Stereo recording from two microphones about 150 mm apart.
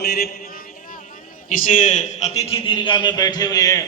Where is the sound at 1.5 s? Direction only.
60° left (ahead or behind); by 3.8 s 25° left (ahead or behind).